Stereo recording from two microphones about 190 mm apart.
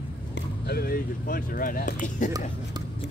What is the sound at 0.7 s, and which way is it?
Speech, 55° left (ahead or behind).